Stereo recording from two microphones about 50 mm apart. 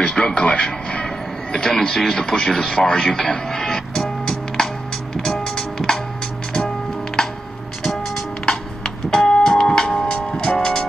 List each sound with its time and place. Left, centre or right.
0.0 s music: centre
1.5 s speech: centre
5.1 s music: centre
8.5 s music: centre